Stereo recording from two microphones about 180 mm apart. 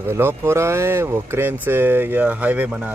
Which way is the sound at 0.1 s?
10° right (ahead or behind).